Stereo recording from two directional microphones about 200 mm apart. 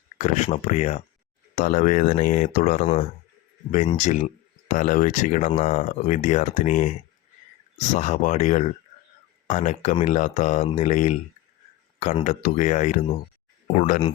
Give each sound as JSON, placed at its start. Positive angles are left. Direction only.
{"t": 0.2, "sound": "speech", "side_deg": 35}
{"t": 3.8, "sound": "speech", "side_deg": 35}
{"t": 7.9, "sound": "speech", "side_deg": 35}